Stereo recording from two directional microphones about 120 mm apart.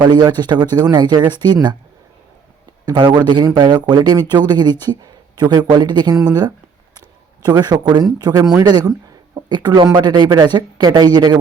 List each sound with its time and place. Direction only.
0.0 s a man's voice: 35° right (ahead or behind)
2.8 s a man's voice: 40° right (ahead or behind)
7.4 s a man's voice: 35° right (ahead or behind)